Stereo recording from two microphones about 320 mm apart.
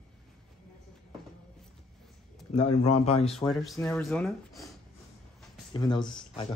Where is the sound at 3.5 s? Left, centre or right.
Centre.